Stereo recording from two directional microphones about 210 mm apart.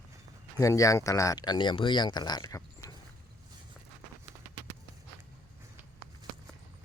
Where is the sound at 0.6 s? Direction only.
15° left (ahead or behind).